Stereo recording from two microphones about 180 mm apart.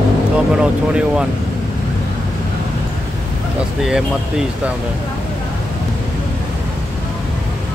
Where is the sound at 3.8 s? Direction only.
5° right (ahead or behind).